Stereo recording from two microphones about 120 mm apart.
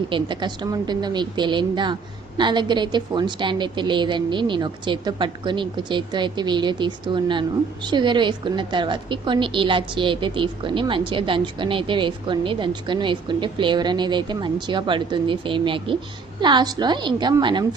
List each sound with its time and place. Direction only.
0.1 s a woman's voice: 40° right (ahead or behind)